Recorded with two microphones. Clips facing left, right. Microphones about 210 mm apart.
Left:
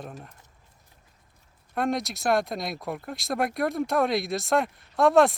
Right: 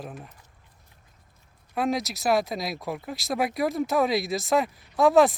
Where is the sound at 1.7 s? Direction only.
Centre (ahead or behind).